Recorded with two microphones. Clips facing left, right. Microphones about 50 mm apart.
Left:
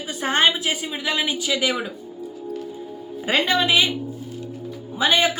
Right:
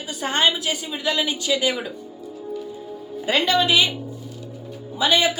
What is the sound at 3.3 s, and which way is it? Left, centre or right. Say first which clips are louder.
Speech: even; left.